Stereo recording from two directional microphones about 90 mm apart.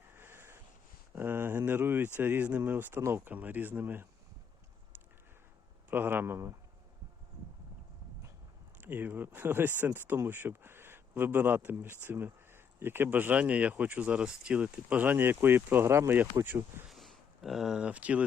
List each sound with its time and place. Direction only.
0.1 s a sound: 25° right (ahead or behind)
2.1 s speech: 20° right (ahead or behind)
5.9 s speech: 25° right (ahead or behind)
8.8 s speech: 20° right (ahead or behind)
16.9 s a sound: centre (ahead or behind)
17.8 s speech: 15° right (ahead or behind)